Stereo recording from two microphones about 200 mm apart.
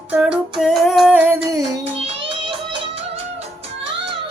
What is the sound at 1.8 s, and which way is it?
Music, 30° right (ahead or behind).